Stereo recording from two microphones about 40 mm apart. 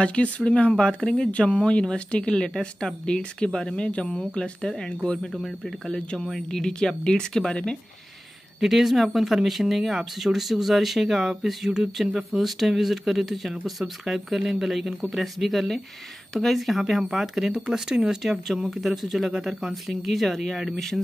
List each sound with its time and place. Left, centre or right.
0.0 s speech: left
0.7 s speech: left
8.5 s speech: centre
18.2 s speech: centre